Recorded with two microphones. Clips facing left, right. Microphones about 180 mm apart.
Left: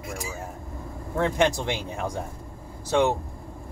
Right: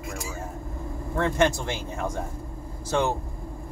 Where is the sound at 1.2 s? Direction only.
15° left (ahead or behind).